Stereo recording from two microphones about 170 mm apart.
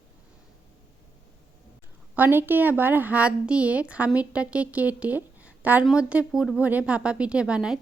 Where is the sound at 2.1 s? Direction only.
10° right (ahead or behind).